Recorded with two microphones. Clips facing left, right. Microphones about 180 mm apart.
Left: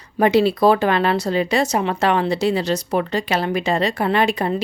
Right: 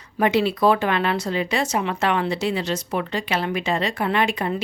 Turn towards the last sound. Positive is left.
turn(degrees=35)  # may be behind; listen again after turning